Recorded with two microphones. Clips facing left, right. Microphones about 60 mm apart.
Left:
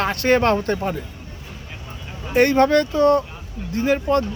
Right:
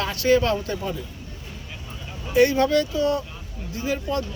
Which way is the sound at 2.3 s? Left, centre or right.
Left.